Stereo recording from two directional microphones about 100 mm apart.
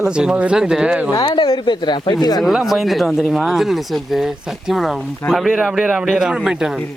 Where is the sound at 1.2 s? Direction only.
50° left (ahead or behind).